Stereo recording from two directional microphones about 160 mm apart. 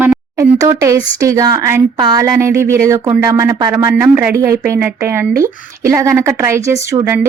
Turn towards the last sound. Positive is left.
turn(degrees=-15)  # may be behind; listen again after turning